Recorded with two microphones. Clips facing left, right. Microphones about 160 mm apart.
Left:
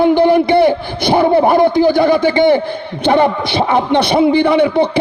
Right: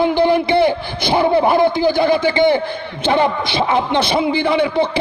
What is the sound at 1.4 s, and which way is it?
Speech, 55° left (ahead or behind).